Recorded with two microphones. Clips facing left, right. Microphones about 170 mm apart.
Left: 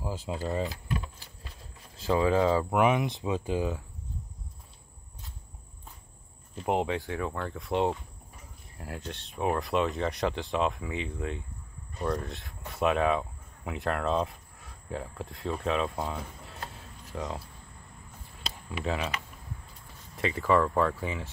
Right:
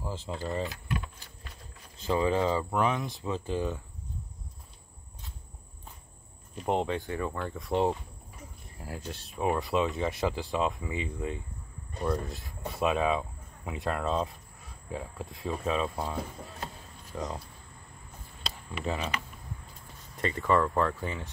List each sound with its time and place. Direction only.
0.0 s speech: 10° left (ahead or behind)
0.7 s vehicle: 30° left (ahead or behind)
2.0 s speech: centre (ahead or behind)
2.7 s speech: 15° left (ahead or behind)
6.6 s speech: 5° left (ahead or behind)
18.7 s speech: 5° left (ahead or behind)
20.2 s speech: centre (ahead or behind)